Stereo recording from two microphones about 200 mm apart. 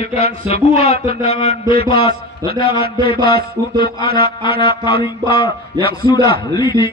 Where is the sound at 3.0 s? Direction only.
50° right (ahead or behind).